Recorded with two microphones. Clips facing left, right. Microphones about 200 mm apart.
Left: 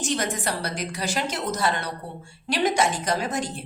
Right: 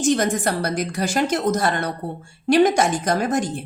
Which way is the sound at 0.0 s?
50° right (ahead or behind).